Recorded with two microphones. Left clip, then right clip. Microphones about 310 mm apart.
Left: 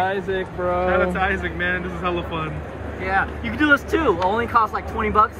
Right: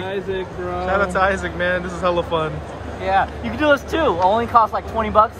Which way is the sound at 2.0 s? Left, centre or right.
Centre.